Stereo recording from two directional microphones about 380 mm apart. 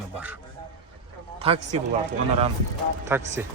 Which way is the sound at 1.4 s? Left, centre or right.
Centre.